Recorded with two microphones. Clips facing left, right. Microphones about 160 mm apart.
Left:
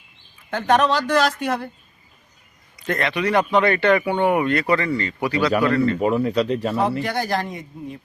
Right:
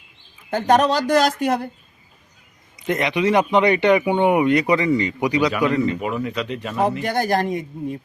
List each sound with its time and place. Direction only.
0.5 s speech: 40° right (ahead or behind)
2.7 s speech: 20° right (ahead or behind)
6.2 s speech: 35° left (ahead or behind)
7.0 s speech: 45° right (ahead or behind)